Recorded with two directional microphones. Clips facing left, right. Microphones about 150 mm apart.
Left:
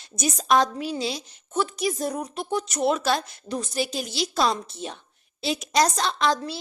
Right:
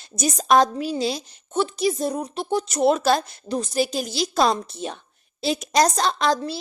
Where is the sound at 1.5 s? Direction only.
30° right (ahead or behind).